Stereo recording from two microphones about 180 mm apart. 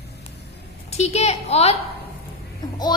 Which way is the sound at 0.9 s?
35° left (ahead or behind).